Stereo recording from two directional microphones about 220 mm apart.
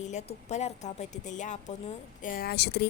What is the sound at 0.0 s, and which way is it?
Speech, 30° left (ahead or behind).